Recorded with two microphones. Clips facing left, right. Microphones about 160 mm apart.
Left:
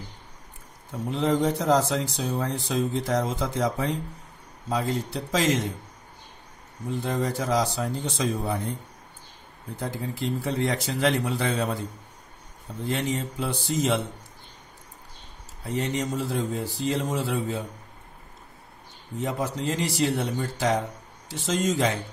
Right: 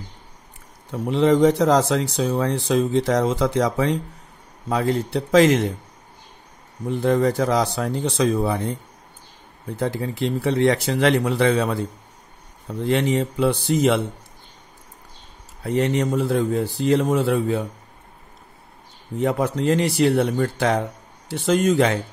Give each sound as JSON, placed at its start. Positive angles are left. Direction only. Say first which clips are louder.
{"t": 0.9, "sound": "speech", "louder": "right 7 dB", "side_deg": -75}
{"t": 4.6, "sound": "speech", "louder": "right 6 dB", "side_deg": -60}
{"t": 6.9, "sound": "speech", "louder": "right 8 dB", "side_deg": -65}
{"t": 9.8, "sound": "speech", "louder": "right 7 dB", "side_deg": -75}
{"t": 15.6, "sound": "speech", "louder": "right 7 dB", "side_deg": -65}
{"t": 19.1, "sound": "speech", "louder": "right 7 dB", "side_deg": -60}